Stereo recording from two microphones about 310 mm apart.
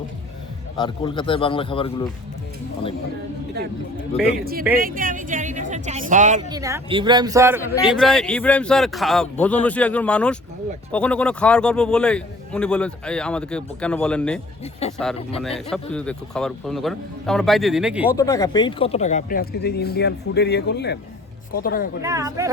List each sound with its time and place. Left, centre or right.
0.8 s speech: centre
4.8 s a woman's voice: right
6.5 s speech: centre
7.9 s a man's voice: centre
14.6 s speech: centre
15.4 s a man's voice: centre
18.1 s speech: centre; by 21.8 s left
22.0 s speech: centre